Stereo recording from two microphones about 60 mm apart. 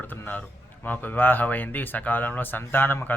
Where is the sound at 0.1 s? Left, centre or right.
Left.